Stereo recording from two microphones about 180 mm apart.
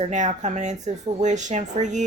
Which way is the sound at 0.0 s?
40° right (ahead or behind).